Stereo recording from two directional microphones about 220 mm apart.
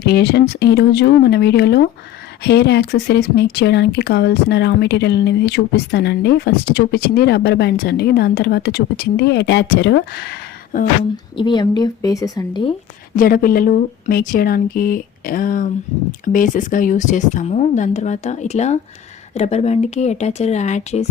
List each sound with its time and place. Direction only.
0.0 s speech: 50° left (ahead or behind)
11.3 s a woman's voice: 20° left (ahead or behind)
13.1 s speech: 40° left (ahead or behind)